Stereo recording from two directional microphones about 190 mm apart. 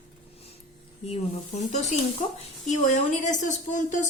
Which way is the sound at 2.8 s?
40° left (ahead or behind).